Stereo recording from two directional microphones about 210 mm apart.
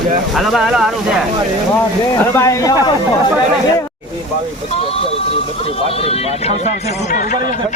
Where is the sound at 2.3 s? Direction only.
15° left (ahead or behind).